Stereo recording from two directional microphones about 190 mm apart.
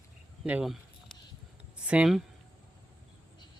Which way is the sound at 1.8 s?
5° right (ahead or behind).